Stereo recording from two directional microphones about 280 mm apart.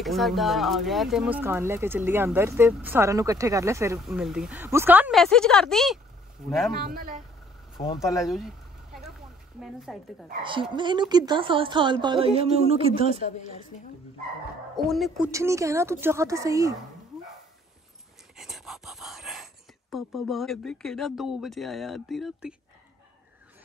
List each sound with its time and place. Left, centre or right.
0.0 s speech: centre
6.8 s a man's voice: right
7.7 s speech: centre
8.2 s a sound: centre
9.6 s speech: centre
10.4 s a woman's voice: centre
13.1 s a woman's voice: left
14.9 s a woman's voice: centre
18.3 s speech: centre